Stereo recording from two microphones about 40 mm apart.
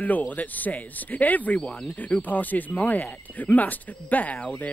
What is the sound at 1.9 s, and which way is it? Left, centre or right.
Speech, left.